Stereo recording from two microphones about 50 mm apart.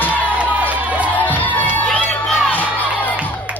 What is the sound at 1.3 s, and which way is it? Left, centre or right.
Crowd, left.